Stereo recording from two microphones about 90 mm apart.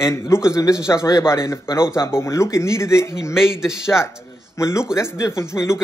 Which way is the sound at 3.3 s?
5° right (ahead or behind).